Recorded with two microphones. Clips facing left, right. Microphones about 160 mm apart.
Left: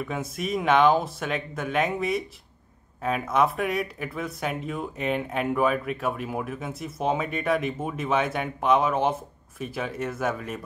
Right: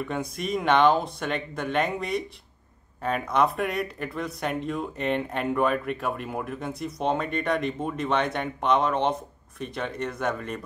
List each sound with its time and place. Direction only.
0.1 s speech: centre (ahead or behind)